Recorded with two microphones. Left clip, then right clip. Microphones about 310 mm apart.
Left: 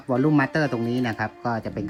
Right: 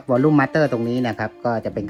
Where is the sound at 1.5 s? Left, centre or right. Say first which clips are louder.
Right 7 dB; right.